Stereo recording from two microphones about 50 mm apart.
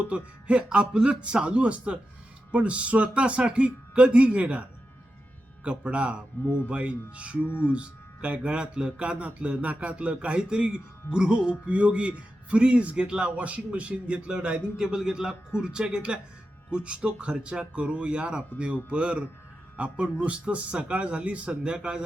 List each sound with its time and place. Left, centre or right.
0.0 s speech: right
5.6 s speech: right
7.4 s speech: left
7.7 s speech: right